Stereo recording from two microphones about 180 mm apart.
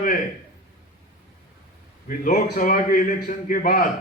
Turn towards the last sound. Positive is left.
turn(degrees=50)  # may be behind; listen again after turning